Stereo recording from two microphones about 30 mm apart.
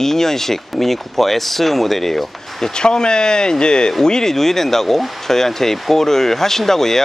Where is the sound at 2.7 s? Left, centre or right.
Left.